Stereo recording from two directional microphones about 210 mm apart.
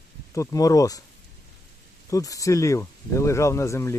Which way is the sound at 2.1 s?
15° left (ahead or behind).